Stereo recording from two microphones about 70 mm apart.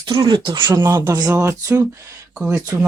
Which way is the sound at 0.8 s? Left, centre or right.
Right.